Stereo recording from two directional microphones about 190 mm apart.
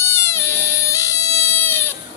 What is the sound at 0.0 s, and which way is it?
Frog, 15° left (ahead or behind).